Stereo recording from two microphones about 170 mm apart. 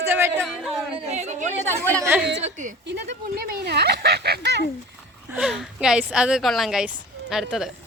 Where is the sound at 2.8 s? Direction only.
90° right.